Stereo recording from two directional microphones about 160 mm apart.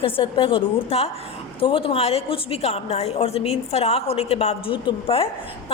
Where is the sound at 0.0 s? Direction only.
35° left (ahead or behind).